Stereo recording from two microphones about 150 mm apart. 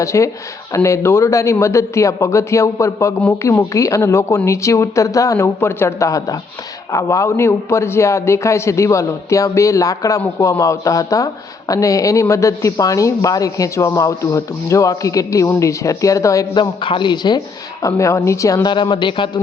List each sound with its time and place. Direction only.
0.0 s speech: 20° left (ahead or behind)
16.8 s speech: 30° left (ahead or behind)